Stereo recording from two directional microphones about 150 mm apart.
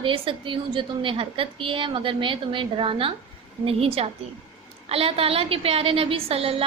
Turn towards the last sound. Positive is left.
turn(degrees=-40)  # may be behind; listen again after turning